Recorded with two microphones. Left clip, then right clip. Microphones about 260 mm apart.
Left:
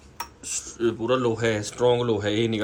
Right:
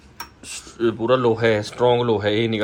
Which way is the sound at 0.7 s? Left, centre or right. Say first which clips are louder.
Right 5 dB; centre.